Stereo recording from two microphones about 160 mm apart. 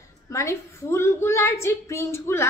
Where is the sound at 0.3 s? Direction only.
20° left (ahead or behind).